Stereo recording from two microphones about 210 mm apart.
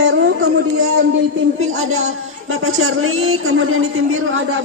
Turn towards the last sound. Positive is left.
turn(degrees=-80)